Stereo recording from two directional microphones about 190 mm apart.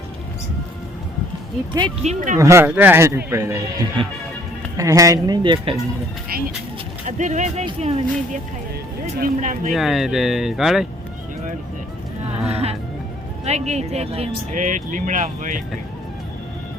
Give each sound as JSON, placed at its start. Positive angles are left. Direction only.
{"t": 2.0, "sound": "speech", "side_deg": -40}
{"t": 2.4, "sound": "speech", "side_deg": -15}
{"t": 7.2, "sound": "speech", "side_deg": -40}
{"t": 9.7, "sound": "speech", "side_deg": 0}
{"t": 12.4, "sound": "music", "side_deg": -35}
{"t": 13.4, "sound": "speech", "side_deg": -35}